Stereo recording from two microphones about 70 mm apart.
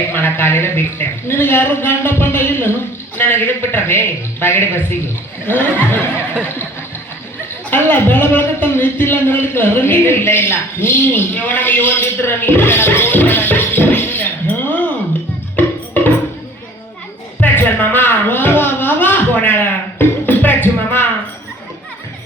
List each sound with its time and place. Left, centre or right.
0.1 s a man's voice: left
7.7 s speech: left
15.5 s music: left
17.4 s a sound: left